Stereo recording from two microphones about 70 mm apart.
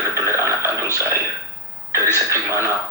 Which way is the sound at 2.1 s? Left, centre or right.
Right.